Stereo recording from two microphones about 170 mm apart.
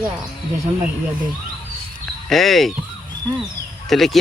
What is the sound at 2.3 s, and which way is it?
Speech, centre (ahead or behind).